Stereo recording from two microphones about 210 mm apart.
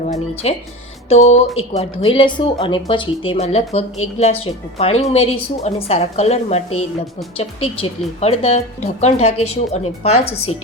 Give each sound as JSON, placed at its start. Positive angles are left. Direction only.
{"t": 0.0, "sound": "speech", "side_deg": 35}